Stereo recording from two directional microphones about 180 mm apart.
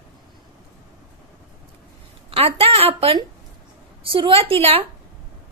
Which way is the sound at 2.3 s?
35° right (ahead or behind).